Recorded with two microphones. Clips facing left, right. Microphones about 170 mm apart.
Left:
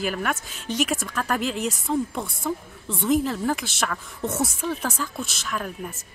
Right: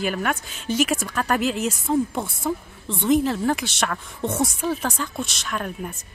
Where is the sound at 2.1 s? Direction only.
20° right (ahead or behind).